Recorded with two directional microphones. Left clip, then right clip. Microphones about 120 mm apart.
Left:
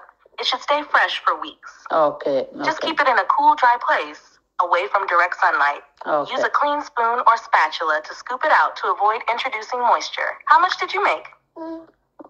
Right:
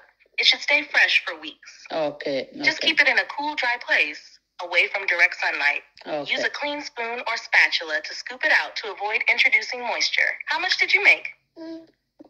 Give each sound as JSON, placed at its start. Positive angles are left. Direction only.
{"t": 0.4, "sound": "speech", "side_deg": 35}